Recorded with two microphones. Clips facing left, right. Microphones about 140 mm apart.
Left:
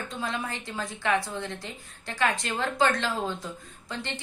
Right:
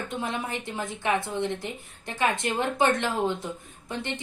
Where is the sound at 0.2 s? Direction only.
20° right (ahead or behind).